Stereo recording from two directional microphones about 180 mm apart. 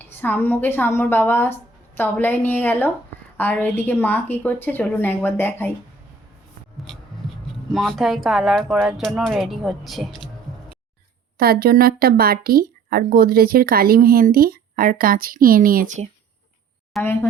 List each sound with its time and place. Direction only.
0.0 s a woman's voice: 10° left (ahead or behind)
6.8 s writing: centre (ahead or behind)
8.8 s speech: centre (ahead or behind)
11.3 s speech: 55° right (ahead or behind)
16.9 s speech: centre (ahead or behind)